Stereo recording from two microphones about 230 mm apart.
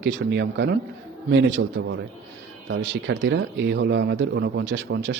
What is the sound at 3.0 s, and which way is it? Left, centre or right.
A man's voice, right.